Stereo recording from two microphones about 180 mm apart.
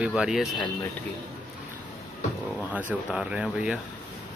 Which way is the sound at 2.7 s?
5° right (ahead or behind).